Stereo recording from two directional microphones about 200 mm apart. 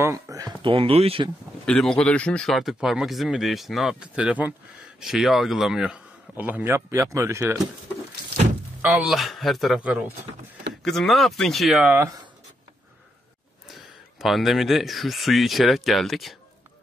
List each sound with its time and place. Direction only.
0.0 s speech: 15° right (ahead or behind)
1.7 s speech: 5° left (ahead or behind); by 7.5 s 15° right (ahead or behind)
8.8 s speech: centre (ahead or behind)
13.7 s speech: centre (ahead or behind)